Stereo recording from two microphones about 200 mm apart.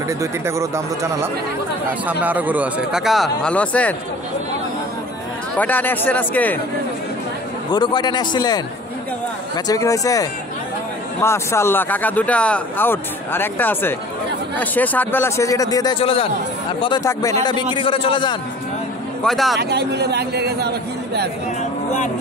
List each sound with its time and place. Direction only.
0.2 s speech: 15° right (ahead or behind); by 3.9 s 5° left (ahead or behind)
5.6 s speech: 10° left (ahead or behind)
7.7 s a man's voice: 20° left (ahead or behind)
9.7 s a man's voice: 15° left (ahead or behind)
19.2 s speech: centre (ahead or behind)
19.6 s a man's voice: 55° right (ahead or behind)